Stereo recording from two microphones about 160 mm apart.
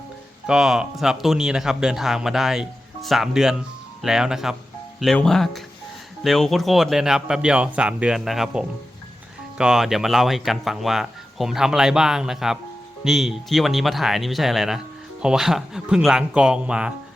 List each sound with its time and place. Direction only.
0.4 s speech: 5° right (ahead or behind)